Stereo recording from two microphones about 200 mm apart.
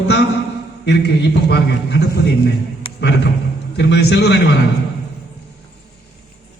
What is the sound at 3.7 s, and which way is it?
Speech, 60° left (ahead or behind).